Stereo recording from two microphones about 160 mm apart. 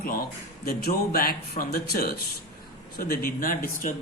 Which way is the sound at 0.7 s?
70° left (ahead or behind).